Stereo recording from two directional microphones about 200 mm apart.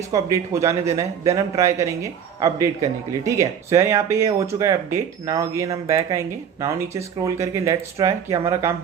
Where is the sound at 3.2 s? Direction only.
15° right (ahead or behind).